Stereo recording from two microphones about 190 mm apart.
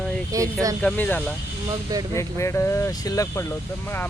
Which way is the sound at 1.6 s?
20° right (ahead or behind).